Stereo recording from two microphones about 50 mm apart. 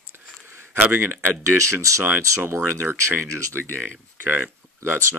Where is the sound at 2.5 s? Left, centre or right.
Right.